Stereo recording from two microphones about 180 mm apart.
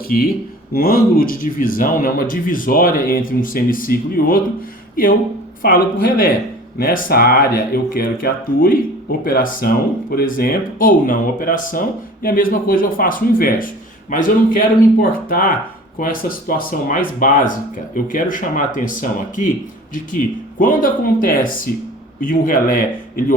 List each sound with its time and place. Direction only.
0.1 s speech: 50° left (ahead or behind)
5.6 s speech: 55° left (ahead or behind)